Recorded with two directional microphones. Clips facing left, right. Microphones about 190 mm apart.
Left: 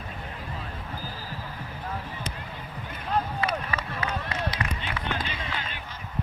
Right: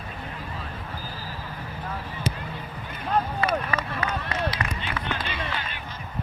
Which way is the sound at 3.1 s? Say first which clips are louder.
Right 3 dB; 55° right (ahead or behind).